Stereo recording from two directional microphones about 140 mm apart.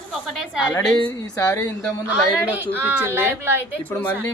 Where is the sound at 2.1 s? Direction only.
10° right (ahead or behind).